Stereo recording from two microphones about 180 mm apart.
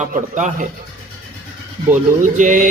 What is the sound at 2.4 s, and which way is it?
Speech, 45° right (ahead or behind).